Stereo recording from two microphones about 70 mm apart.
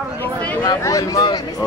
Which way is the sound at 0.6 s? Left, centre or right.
Left.